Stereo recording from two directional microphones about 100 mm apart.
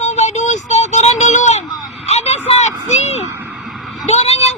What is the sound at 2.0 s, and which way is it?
Vehicle, 90° left.